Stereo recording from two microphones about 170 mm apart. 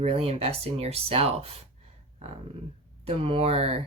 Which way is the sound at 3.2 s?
35° right (ahead or behind).